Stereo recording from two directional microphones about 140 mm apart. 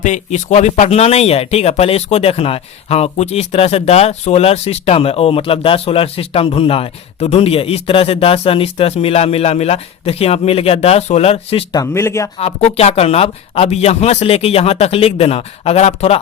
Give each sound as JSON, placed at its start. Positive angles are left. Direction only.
{"t": 0.0, "sound": "speech", "side_deg": 60}
{"t": 11.7, "sound": "speech", "side_deg": 25}
{"t": 12.4, "sound": "speech", "side_deg": 50}